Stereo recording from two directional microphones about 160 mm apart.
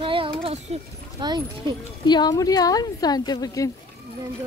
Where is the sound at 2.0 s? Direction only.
25° left (ahead or behind).